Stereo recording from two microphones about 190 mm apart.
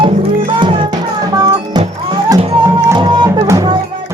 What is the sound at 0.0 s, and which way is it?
Music, 25° right (ahead or behind).